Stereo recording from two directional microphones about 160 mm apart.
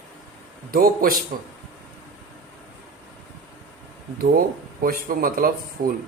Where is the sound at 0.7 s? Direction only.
65° right (ahead or behind).